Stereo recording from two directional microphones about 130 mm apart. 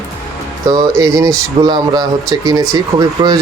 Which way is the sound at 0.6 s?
30° right (ahead or behind).